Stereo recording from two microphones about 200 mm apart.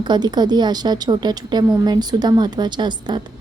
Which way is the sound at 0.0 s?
20° right (ahead or behind).